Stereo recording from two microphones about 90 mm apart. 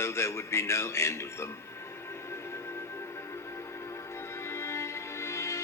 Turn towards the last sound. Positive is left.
turn(degrees=30)  # may be behind; listen again after turning